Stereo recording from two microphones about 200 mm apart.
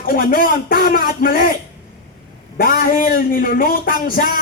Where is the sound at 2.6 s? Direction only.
45° left (ahead or behind).